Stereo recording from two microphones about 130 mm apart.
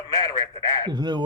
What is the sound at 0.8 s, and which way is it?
Speech, 35° right (ahead or behind).